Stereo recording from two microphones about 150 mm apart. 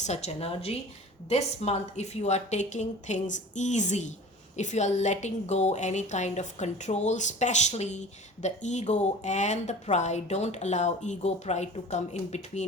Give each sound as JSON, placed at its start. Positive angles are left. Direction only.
{"t": 0.0, "sound": "a woman's voice", "side_deg": 45}